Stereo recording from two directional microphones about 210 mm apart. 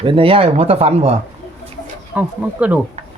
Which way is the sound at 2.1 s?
5° right (ahead or behind).